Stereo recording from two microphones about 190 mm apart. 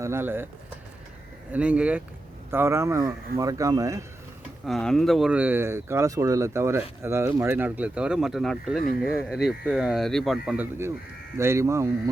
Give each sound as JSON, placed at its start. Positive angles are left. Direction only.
{"t": 0.0, "sound": "speech", "side_deg": -15}
{"t": 1.5, "sound": "speech", "side_deg": -5}
{"t": 4.6, "sound": "speech", "side_deg": 0}
{"t": 11.3, "sound": "speech", "side_deg": -15}